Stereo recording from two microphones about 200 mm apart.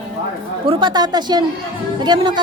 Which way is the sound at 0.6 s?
25° right (ahead or behind).